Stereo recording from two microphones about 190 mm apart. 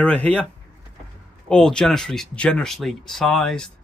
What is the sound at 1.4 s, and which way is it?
Speech, 5° left (ahead or behind).